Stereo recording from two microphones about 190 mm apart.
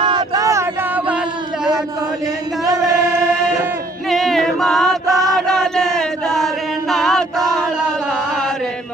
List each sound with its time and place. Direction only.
0.0 s a sound: 25° right (ahead or behind)
2.6 s chant: 15° right (ahead or behind)
4.1 s chant: centre (ahead or behind)